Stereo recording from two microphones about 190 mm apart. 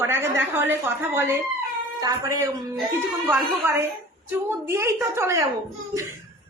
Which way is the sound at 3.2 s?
Centre (ahead or behind).